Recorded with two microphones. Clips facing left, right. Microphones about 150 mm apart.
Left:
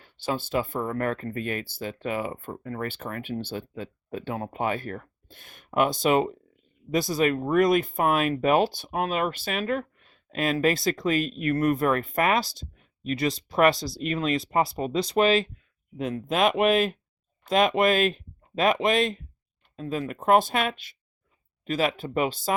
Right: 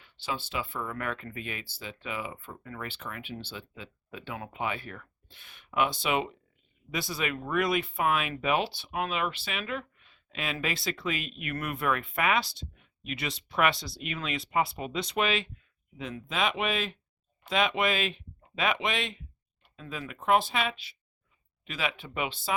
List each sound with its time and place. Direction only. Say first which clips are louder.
0.0 s speech: left 6 dB; 45° left (ahead or behind)